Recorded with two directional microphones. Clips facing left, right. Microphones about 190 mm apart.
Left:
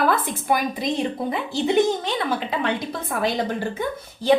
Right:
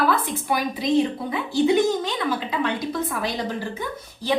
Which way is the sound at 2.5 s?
55° left (ahead or behind).